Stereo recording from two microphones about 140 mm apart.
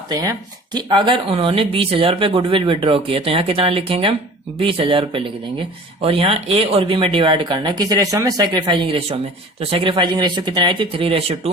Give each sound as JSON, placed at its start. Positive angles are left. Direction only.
{"t": 0.1, "sound": "speech", "side_deg": -25}